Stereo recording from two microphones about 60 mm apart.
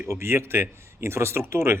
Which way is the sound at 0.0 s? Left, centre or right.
Right.